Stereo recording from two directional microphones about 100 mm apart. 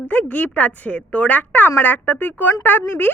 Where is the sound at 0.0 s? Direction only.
15° left (ahead or behind).